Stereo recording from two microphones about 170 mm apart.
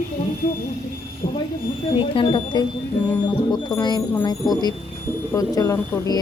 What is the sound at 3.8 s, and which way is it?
Speech, 25° left (ahead or behind).